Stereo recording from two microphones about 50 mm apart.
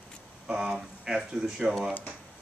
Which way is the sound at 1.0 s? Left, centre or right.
Centre.